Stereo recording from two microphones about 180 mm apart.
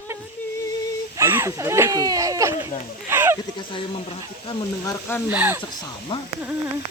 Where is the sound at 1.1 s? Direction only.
15° right (ahead or behind).